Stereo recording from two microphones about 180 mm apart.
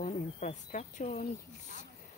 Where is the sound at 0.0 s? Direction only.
40° left (ahead or behind).